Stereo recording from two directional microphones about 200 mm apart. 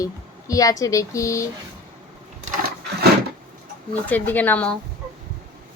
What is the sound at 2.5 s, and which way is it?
Sewing machine, 50° right (ahead or behind).